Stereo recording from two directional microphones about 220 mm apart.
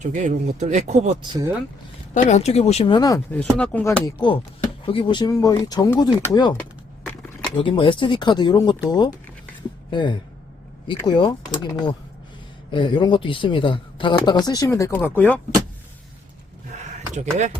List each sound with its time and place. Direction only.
0.0 s speech: 35° right (ahead or behind)
2.1 s speech: 35° left (ahead or behind)
3.3 s speech: 5° left (ahead or behind)
4.0 s speech: 20° left (ahead or behind)
9.9 s speech: 20° left (ahead or behind)
16.7 s a sound: 30° right (ahead or behind)
17.2 s speech: 30° right (ahead or behind)